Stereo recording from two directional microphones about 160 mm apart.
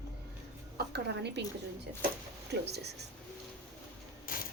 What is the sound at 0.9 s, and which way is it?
Speech, 90° right.